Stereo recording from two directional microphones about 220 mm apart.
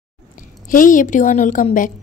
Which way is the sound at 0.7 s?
35° left (ahead or behind).